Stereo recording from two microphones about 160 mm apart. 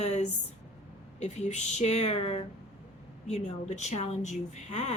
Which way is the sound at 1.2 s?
45° left (ahead or behind).